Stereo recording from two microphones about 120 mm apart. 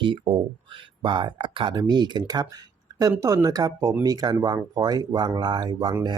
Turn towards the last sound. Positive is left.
turn(degrees=-35)  # may be behind; listen again after turning